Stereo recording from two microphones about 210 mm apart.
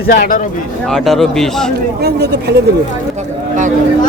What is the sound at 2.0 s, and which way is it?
Speech, 50° right (ahead or behind).